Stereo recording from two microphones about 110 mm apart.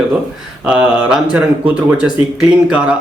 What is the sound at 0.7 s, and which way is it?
Speech, 10° right (ahead or behind).